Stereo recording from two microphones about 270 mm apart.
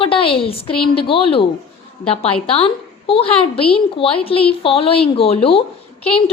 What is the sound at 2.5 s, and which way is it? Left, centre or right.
A woman's voice, left.